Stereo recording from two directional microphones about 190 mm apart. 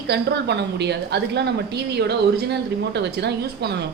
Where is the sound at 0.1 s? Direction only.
60° right (ahead or behind).